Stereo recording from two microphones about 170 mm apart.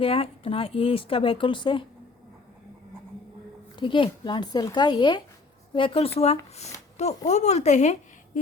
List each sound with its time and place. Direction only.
0.0 s speech: 35° left (ahead or behind)
3.8 s a woman's voice: 30° left (ahead or behind)